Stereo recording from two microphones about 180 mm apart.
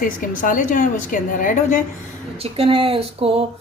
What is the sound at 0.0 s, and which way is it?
A woman's voice, 50° left (ahead or behind).